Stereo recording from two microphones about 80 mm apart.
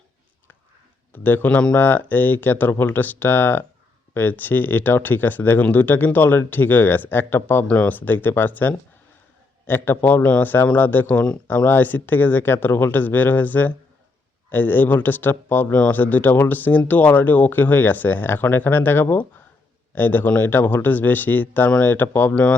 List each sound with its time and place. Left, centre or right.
1.1 s speech: left